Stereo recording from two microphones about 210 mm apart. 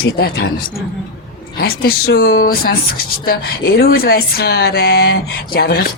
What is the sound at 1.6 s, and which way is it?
Speech, 45° left (ahead or behind).